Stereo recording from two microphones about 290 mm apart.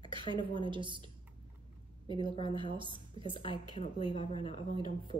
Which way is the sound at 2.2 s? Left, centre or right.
Centre.